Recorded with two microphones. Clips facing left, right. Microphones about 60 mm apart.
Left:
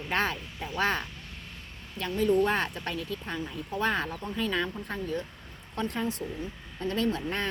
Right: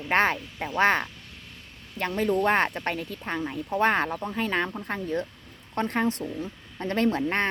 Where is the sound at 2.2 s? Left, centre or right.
Right.